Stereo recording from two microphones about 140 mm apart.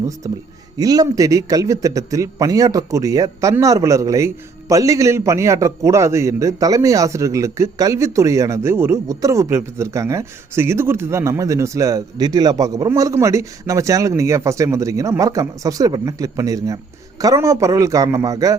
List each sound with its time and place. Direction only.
0.2 s a man's voice: 25° right (ahead or behind)